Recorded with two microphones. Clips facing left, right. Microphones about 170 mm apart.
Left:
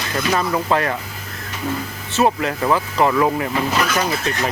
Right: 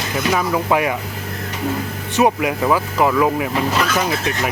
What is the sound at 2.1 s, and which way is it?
Speech, 15° right (ahead or behind).